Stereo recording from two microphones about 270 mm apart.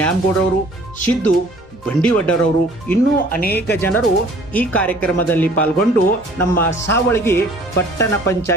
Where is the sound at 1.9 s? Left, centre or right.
Centre.